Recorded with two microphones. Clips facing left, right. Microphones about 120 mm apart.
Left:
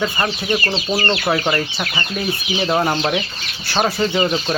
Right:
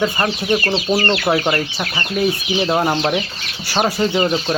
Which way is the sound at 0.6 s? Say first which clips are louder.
Right 3 dB; 15° right (ahead or behind).